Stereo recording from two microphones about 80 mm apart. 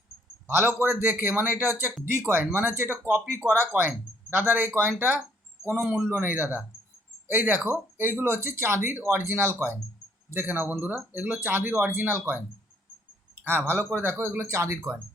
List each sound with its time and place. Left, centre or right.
0.4 s speech: right